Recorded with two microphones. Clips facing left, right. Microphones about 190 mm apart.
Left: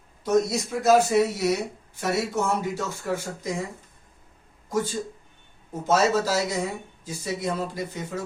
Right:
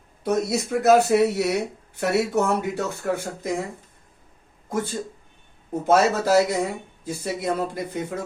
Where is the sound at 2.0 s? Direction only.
65° right (ahead or behind).